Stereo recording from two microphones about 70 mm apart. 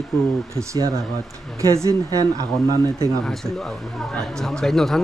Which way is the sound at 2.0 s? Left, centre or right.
Right.